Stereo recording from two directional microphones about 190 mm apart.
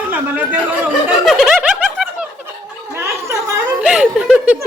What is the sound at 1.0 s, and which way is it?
Snicker, centre (ahead or behind).